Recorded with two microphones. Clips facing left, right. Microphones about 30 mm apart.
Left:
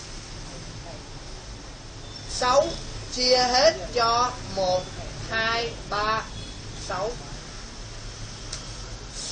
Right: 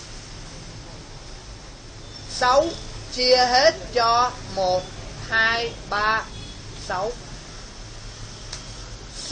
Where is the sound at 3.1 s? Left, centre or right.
Right.